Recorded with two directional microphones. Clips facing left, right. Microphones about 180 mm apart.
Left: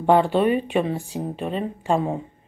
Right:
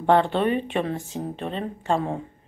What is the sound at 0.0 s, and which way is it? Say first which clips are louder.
A woman's voice: left 2 dB; 10° left (ahead or behind).